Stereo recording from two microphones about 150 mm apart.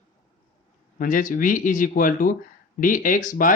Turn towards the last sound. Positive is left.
turn(degrees=65)  # may be behind; listen again after turning